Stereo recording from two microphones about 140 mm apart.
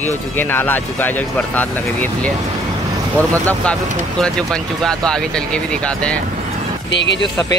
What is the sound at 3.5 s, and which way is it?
Speech, 5° left (ahead or behind).